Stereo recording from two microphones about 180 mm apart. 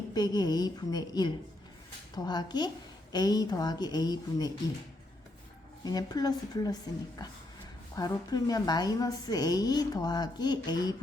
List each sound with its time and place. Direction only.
0.1 s a woman's voice: 20° left (ahead or behind)
5.8 s a woman's voice: 20° left (ahead or behind)